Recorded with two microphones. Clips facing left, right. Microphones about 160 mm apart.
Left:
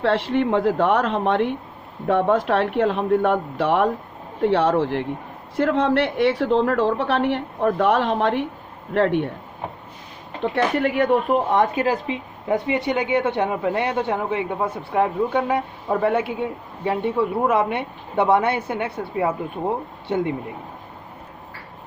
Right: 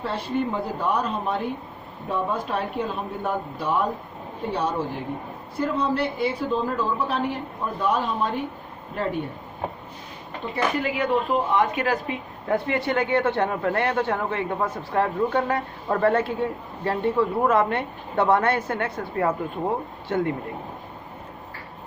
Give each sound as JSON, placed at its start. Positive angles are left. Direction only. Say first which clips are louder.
{"t": 0.0, "sound": "a woman's voice", "louder": "left 6 dB", "side_deg": 90}
{"t": 10.4, "sound": "speech", "louder": "left 5 dB", "side_deg": 70}
{"t": 11.7, "sound": "speech", "louder": "left 3 dB", "side_deg": 30}
{"t": 12.0, "sound": "a woman's voice", "louder": "left 3 dB", "side_deg": 20}